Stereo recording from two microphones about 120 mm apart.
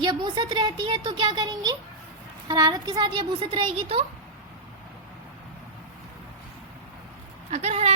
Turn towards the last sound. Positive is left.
turn(degrees=-60)  # may be behind; listen again after turning